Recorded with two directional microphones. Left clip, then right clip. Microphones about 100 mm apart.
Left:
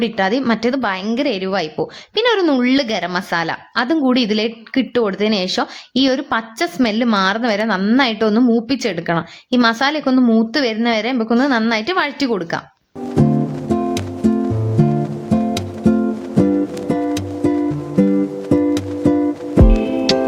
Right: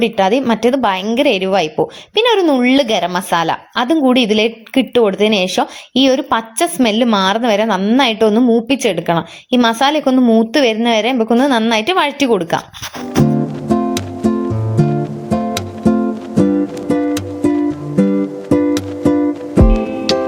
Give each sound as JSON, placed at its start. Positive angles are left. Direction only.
{"t": 0.0, "sound": "a woman's voice", "side_deg": -15}
{"t": 8.7, "sound": "a woman's voice", "side_deg": -20}
{"t": 10.2, "sound": "a woman's voice", "side_deg": -5}
{"t": 10.5, "sound": "a woman's voice", "side_deg": -30}
{"t": 13.2, "sound": "music", "side_deg": 0}
{"t": 20.1, "sound": "music", "side_deg": 15}